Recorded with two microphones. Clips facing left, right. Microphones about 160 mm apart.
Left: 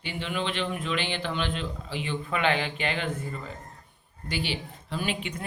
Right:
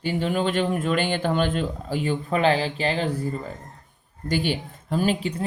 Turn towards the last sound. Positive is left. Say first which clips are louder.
# right 8 dB
turn(degrees=-35)  # may be behind; listen again after turning